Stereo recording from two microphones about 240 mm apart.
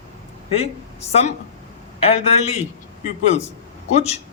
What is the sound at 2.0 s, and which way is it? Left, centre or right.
Speech, left.